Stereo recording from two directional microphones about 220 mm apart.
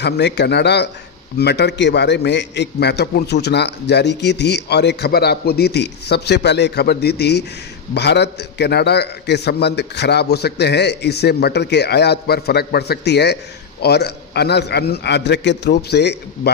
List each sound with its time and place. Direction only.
0.0 s a man's voice: 50° left (ahead or behind)